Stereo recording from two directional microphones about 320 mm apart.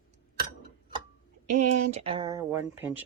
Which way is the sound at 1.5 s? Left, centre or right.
Right.